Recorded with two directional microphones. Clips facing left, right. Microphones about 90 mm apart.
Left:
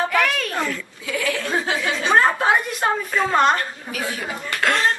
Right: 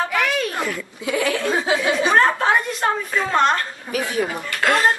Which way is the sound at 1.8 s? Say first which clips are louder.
Right 3 dB; 15° right (ahead or behind).